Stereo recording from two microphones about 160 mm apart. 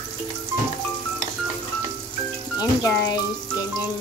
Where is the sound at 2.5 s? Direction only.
25° left (ahead or behind).